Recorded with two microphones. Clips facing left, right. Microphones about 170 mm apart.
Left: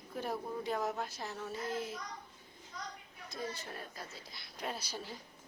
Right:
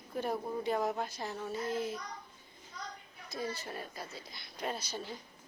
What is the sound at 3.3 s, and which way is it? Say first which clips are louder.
Speech: right 3 dB; 5° right (ahead or behind).